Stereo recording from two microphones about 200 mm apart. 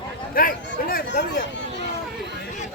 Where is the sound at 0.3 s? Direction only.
45° left (ahead or behind).